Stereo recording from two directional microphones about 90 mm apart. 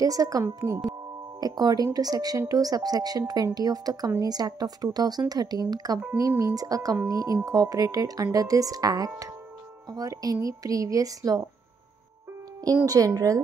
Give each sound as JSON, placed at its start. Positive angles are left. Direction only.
{"t": 0.0, "sound": "a woman's voice", "side_deg": -40}
{"t": 12.8, "sound": "speech", "side_deg": -40}